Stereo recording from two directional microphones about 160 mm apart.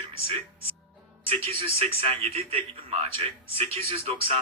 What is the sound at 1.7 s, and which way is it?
Speech, 40° right (ahead or behind).